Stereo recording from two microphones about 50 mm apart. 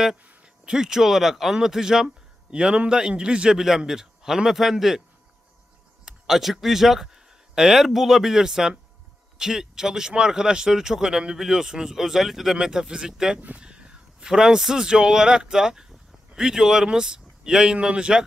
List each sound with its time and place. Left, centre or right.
0.7 s speech: centre
3.5 s speech: centre
6.0 s a man's voice: centre